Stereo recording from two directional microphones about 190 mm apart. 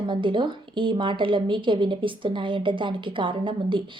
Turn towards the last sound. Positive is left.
turn(degrees=-25)  # may be behind; listen again after turning